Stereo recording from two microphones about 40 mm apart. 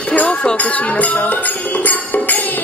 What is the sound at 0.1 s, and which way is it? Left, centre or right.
Music, left.